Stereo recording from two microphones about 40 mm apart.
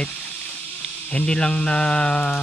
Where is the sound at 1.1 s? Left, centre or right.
Left.